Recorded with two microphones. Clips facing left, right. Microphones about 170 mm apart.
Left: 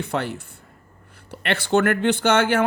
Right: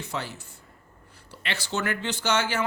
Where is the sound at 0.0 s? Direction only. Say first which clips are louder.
Left 8 dB; 60° left (ahead or behind).